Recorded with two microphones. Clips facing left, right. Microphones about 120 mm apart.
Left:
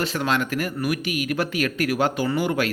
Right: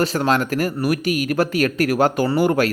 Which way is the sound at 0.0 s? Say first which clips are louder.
Right 5 dB; 40° right (ahead or behind).